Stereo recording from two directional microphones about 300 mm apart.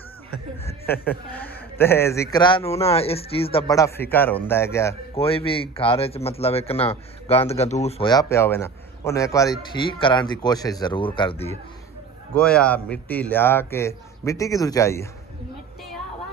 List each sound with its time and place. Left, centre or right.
0.6 s speech: centre
12.4 s speech: centre